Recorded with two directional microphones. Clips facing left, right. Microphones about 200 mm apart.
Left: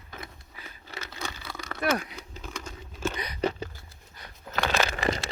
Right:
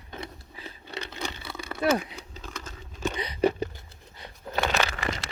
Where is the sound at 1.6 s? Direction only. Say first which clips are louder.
Right 3 dB; 5° right (ahead or behind).